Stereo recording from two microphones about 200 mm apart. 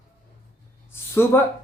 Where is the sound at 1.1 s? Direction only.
10° left (ahead or behind).